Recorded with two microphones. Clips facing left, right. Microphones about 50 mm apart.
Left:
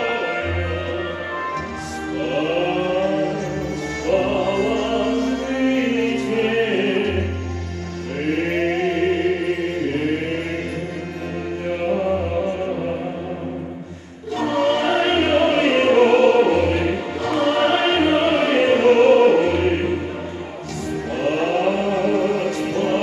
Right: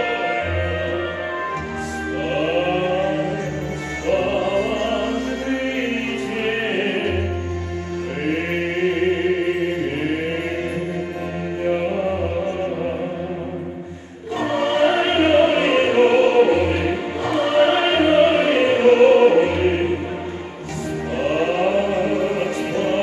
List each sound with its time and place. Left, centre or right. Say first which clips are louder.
0.0 s music: right 1 dB; centre
2.1 s music: even; centre
8.3 s music: left 3 dB; centre
14.4 s music: right 1 dB; centre
21.2 s music: even; centre